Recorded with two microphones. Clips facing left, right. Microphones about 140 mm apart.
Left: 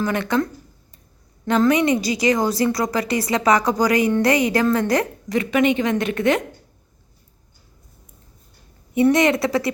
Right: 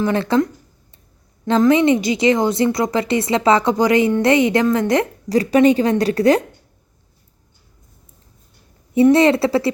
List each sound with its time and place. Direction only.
0.0 s a woman's voice: 25° right (ahead or behind)
5.4 s a woman's voice: 35° right (ahead or behind)
9.1 s a woman's voice: 30° right (ahead or behind)